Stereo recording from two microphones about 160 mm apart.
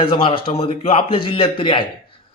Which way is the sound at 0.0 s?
35° left (ahead or behind).